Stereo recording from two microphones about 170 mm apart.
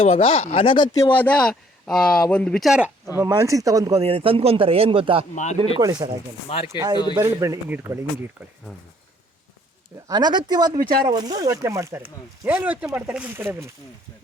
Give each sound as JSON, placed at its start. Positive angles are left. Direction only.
{"t": 0.0, "sound": "speech", "side_deg": 35}
{"t": 1.1, "sound": "speech", "side_deg": 10}
{"t": 3.2, "sound": "speech", "side_deg": -20}
{"t": 4.0, "sound": "a man's voice", "side_deg": -35}
{"t": 5.3, "sound": "speech", "side_deg": 45}
{"t": 5.8, "sound": "speech", "side_deg": -25}
{"t": 10.1, "sound": "speech", "side_deg": -25}